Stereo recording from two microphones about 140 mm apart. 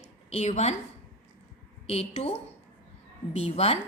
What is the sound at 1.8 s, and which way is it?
A woman's voice, 45° left (ahead or behind).